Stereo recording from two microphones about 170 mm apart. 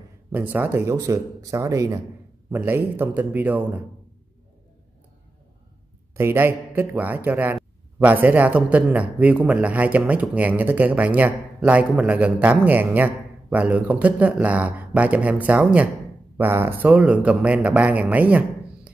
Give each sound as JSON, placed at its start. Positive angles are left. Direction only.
{"t": 0.3, "sound": "speech", "side_deg": -10}
{"t": 6.1, "sound": "speech", "side_deg": -15}